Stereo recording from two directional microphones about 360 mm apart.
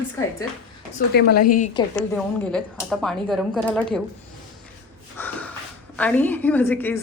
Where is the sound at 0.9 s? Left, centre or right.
Left.